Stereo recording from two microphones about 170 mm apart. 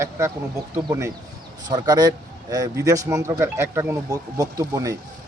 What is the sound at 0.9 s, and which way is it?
Speech, 15° right (ahead or behind).